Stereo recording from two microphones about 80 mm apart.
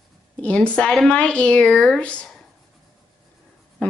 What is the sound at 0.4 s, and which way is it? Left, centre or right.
Speech, centre.